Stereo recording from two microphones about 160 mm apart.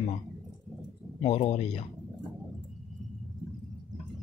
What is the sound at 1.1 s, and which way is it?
Speech, 35° left (ahead or behind).